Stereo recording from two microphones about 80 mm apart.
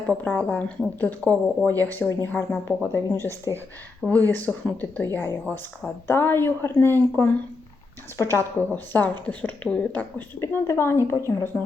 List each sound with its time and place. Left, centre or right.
0.1 s a woman's voice: centre; by 3.5 s left
4.0 s a woman's voice: left